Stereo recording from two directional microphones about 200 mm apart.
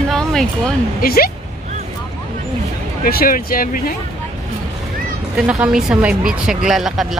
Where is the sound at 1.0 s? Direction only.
50° left (ahead or behind).